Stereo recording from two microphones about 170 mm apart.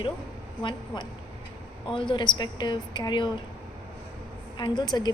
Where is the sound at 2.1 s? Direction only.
25° left (ahead or behind).